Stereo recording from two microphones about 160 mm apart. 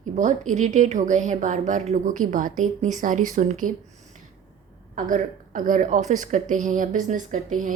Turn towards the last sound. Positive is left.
turn(degrees=-55)  # may be behind; listen again after turning